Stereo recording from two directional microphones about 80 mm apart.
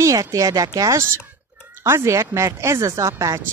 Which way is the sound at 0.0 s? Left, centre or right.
Right.